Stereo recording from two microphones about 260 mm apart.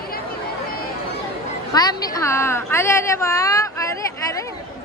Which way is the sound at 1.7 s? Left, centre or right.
Centre.